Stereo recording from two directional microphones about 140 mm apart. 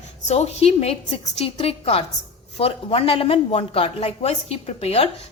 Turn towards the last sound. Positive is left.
turn(degrees=45)  # may be behind; listen again after turning